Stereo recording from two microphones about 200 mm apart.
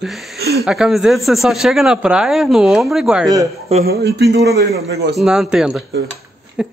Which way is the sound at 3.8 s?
55° right (ahead or behind).